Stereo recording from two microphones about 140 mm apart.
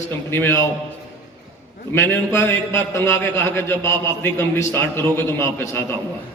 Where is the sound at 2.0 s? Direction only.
15° left (ahead or behind).